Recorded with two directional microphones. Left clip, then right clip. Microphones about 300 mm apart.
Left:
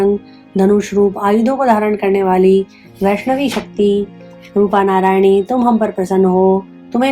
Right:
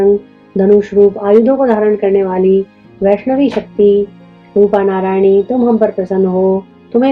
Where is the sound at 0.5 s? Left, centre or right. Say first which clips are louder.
Right 4 dB; left.